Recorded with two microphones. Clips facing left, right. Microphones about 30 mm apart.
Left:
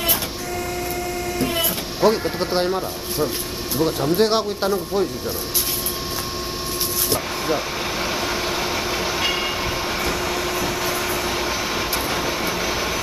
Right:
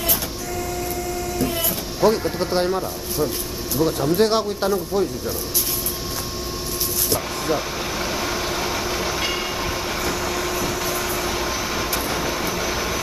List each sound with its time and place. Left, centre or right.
1.4 s a sound: left
3.8 s speech: centre
7.1 s vehicle: centre